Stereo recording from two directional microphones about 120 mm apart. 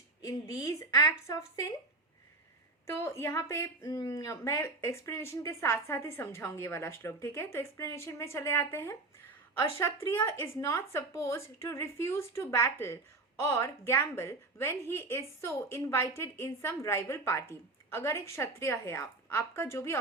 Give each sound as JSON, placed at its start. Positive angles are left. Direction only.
{"t": 0.3, "sound": "a woman's voice", "side_deg": 25}
{"t": 2.8, "sound": "a woman's voice", "side_deg": 25}